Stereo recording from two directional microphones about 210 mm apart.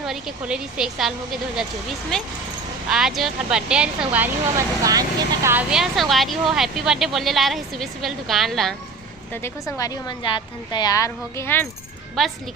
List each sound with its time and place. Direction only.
0.0 s speech: centre (ahead or behind)
2.9 s speech: centre (ahead or behind)
9.3 s a woman's voice: 15° left (ahead or behind)